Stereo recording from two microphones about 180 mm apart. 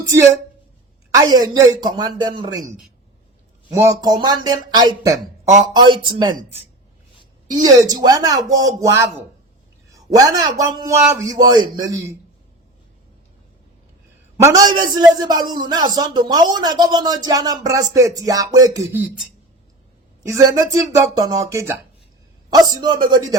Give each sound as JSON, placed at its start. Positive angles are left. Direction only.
{"t": 1.1, "sound": "a man's voice", "side_deg": -20}
{"t": 3.8, "sound": "a man's voice", "side_deg": -20}
{"t": 7.5, "sound": "a man's voice", "side_deg": -20}
{"t": 14.3, "sound": "a man's voice", "side_deg": -20}
{"t": 20.2, "sound": "a man's voice", "side_deg": -20}